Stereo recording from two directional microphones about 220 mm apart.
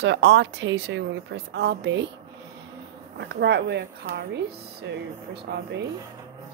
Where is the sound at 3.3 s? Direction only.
50° right (ahead or behind).